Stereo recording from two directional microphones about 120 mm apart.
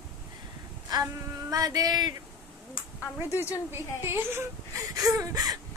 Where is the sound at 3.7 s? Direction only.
20° right (ahead or behind).